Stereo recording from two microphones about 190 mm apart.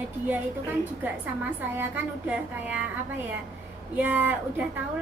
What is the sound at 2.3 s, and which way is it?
Speech, 5° right (ahead or behind).